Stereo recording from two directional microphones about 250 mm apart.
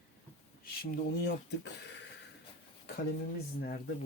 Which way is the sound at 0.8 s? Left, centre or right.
Left.